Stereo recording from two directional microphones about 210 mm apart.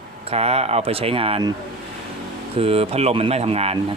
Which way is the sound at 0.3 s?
30° right (ahead or behind).